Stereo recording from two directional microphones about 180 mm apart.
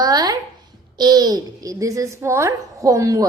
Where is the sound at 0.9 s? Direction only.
25° right (ahead or behind).